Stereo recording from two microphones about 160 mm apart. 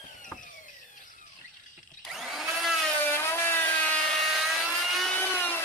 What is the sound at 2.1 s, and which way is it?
Vacuum cleaner, centre (ahead or behind).